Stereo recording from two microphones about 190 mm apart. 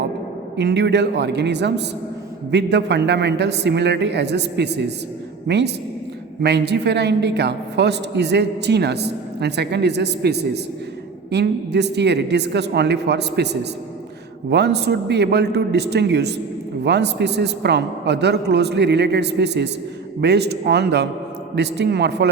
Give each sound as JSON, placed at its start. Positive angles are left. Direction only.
{"t": 0.5, "sound": "a woman's voice", "side_deg": -65}